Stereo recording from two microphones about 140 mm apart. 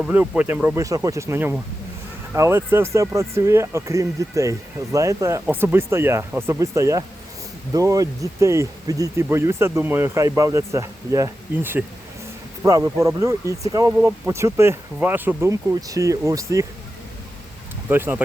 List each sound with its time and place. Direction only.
0.0 s speech: 10° right (ahead or behind)
0.9 s speech: 25° right (ahead or behind)
17.8 s speech: 15° right (ahead or behind)